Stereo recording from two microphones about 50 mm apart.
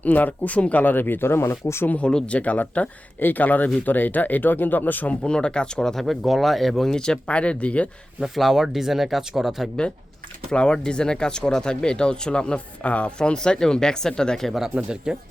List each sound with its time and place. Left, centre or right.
0.0 s speech: left
2.0 s speech: centre; by 5.1 s left
5.2 s speech: centre
6.9 s speech: centre
8.2 s speech: centre
10.5 s speech: centre
15.1 s speech: centre